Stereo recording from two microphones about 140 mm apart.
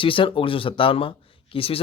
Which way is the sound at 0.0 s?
40° left (ahead or behind).